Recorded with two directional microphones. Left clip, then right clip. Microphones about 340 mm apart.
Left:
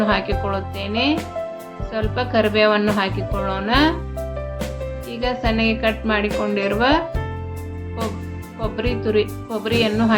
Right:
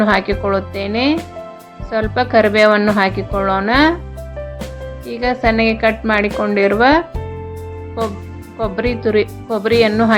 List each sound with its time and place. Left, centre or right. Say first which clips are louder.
0.0 s speech: right 5 dB; right
5.0 s speech: right 7 dB; right
8.5 s speech: right 5 dB; right